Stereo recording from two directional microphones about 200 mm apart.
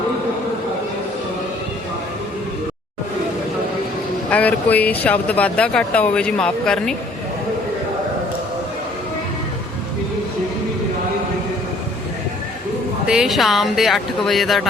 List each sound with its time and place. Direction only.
4.3 s speech: 5° left (ahead or behind)
13.1 s speech: centre (ahead or behind)